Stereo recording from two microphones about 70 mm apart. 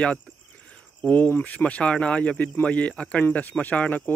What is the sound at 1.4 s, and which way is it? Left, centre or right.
A man's voice, left.